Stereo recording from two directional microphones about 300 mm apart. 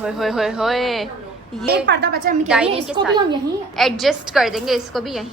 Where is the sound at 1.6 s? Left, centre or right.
Right.